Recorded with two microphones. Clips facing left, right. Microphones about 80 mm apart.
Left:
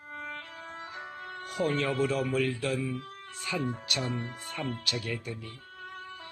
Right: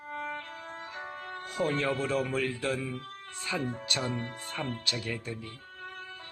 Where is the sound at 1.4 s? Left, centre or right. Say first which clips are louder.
Even; right.